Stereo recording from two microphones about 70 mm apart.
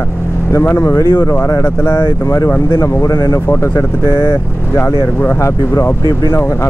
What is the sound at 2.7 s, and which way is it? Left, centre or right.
Speech, left.